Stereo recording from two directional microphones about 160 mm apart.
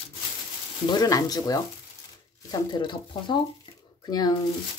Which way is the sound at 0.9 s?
25° left (ahead or behind).